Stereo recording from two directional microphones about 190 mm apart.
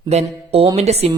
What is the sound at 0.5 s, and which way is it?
Speech, 35° right (ahead or behind).